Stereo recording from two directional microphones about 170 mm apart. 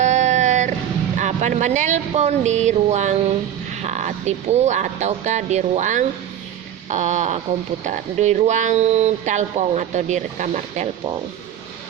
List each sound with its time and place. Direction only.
0.0 s vehicle: 45° right (ahead or behind)
1.2 s speech: 45° right (ahead or behind)